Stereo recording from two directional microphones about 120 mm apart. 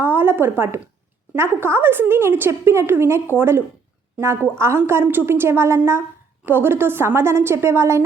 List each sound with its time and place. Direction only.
0.0 s a woman's voice: 15° right (ahead or behind)